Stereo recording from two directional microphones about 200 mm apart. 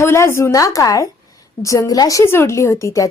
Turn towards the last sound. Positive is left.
turn(degrees=15)  # may be behind; listen again after turning